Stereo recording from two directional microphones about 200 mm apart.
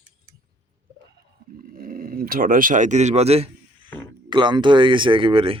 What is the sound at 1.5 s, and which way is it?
Speech, 45° right (ahead or behind).